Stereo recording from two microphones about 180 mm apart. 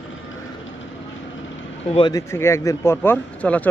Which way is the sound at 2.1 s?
15° left (ahead or behind).